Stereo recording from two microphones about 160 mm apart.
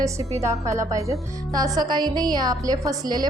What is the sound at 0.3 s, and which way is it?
A woman's voice, 20° right (ahead or behind).